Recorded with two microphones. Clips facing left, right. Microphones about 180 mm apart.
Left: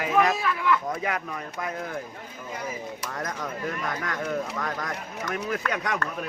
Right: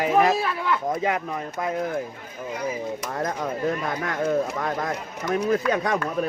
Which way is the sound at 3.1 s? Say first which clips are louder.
Right 5 dB; 25° right (ahead or behind).